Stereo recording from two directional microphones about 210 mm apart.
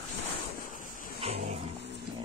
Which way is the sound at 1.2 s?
30° right (ahead or behind).